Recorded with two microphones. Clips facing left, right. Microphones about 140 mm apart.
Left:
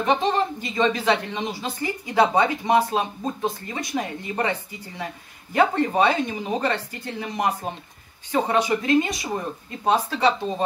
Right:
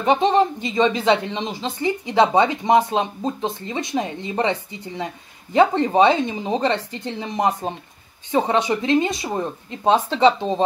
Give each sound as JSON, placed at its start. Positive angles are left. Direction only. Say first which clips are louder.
{"t": 0.0, "sound": "speech", "louder": "right 5 dB", "side_deg": -20}